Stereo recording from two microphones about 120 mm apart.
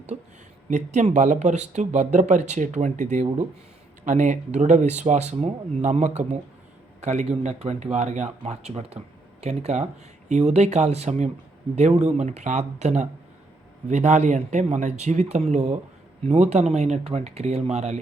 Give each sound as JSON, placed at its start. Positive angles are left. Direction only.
{"t": 0.1, "sound": "speech", "side_deg": -80}